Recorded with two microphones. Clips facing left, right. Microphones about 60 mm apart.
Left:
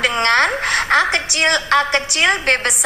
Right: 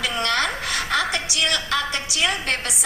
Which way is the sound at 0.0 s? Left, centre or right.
Left.